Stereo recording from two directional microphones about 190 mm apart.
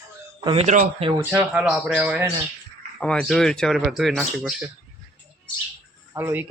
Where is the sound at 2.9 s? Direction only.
5° left (ahead or behind).